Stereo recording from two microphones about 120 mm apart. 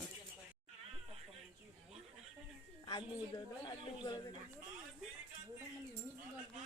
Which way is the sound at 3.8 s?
40° left (ahead or behind).